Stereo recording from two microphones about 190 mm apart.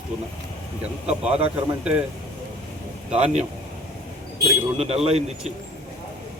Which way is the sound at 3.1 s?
35° right (ahead or behind).